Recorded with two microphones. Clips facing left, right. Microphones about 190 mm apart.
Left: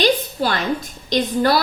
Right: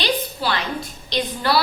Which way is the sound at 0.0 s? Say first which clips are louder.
Left 5 dB; 45° left (ahead or behind).